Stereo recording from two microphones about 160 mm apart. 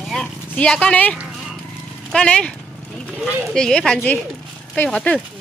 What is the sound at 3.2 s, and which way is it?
Speech, 10° right (ahead or behind).